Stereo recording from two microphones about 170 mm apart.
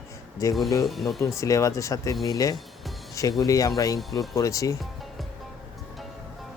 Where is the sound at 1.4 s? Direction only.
20° left (ahead or behind).